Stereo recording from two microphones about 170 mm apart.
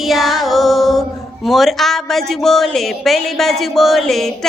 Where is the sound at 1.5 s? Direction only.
Centre (ahead or behind).